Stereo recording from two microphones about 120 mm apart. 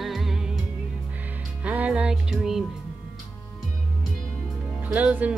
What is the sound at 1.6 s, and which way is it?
Music, 10° right (ahead or behind).